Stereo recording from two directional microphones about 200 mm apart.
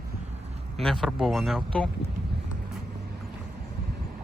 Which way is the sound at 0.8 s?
Centre (ahead or behind).